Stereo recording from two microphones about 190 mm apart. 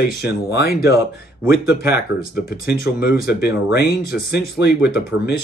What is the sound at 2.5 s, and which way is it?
Speech, 55° left (ahead or behind).